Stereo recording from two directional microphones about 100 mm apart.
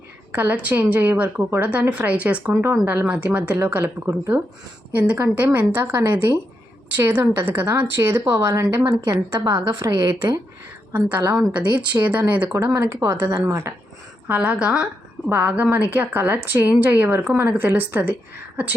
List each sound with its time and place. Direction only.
0.3 s a woman's voice: 15° right (ahead or behind)
2.5 s speech: 25° right (ahead or behind)
3.1 s a woman's voice: 15° right (ahead or behind)
9.4 s a woman's voice: 40° right (ahead or behind)
10.9 s a woman's voice: 15° right (ahead or behind)
11.6 s speech: 50° right (ahead or behind)
12.3 s a woman's voice: 15° right (ahead or behind)
12.7 s speech: 25° right (ahead or behind)
14.3 s a woman's voice: 15° right (ahead or behind)